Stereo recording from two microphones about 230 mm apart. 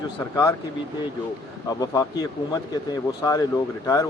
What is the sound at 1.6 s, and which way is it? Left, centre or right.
A man's voice, centre.